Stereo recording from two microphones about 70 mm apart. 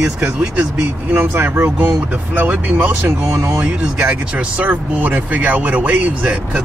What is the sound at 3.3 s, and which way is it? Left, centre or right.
Speech, right.